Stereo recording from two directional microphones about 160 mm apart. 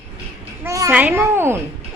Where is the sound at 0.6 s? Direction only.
20° right (ahead or behind).